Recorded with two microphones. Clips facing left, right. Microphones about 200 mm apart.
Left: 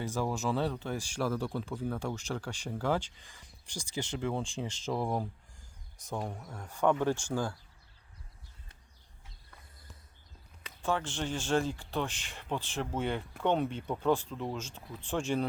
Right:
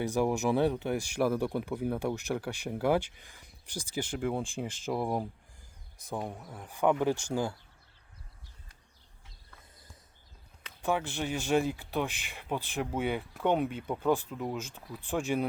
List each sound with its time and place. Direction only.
0.2 s speech: 15° right (ahead or behind)
4.4 s speech: 55° right (ahead or behind)
4.9 s speech: 10° right (ahead or behind)
10.8 s speech: 10° right (ahead or behind)